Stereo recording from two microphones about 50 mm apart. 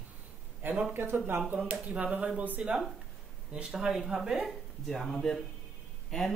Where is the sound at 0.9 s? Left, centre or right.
Right.